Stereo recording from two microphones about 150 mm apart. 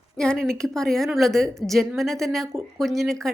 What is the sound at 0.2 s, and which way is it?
A woman's voice, 5° left (ahead or behind).